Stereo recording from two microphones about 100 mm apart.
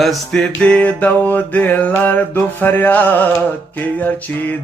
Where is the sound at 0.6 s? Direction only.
15° left (ahead or behind).